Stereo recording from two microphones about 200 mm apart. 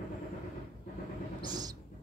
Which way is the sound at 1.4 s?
20° right (ahead or behind).